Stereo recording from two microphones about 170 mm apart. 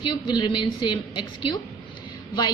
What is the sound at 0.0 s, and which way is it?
A woman's voice, 25° left (ahead or behind).